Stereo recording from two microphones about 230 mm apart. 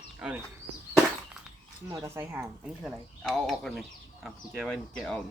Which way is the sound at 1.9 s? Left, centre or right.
Centre.